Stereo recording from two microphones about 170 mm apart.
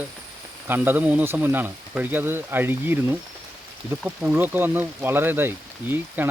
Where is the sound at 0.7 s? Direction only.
10° right (ahead or behind).